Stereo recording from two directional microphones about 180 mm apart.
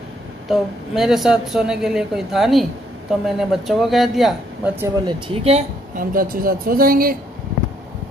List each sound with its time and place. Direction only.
0.5 s speech: centre (ahead or behind)
5.0 s speech: 30° right (ahead or behind)
5.9 s speech: 50° right (ahead or behind)